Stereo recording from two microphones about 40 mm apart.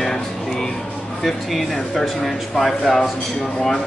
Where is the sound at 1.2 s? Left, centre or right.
Centre.